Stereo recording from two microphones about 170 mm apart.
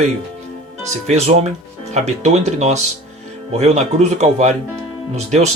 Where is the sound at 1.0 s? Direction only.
40° right (ahead or behind).